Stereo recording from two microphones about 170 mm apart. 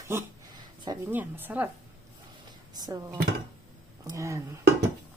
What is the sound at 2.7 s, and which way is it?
Speech, 20° right (ahead or behind).